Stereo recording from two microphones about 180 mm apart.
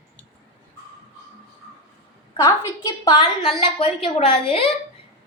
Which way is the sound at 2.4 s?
20° left (ahead or behind).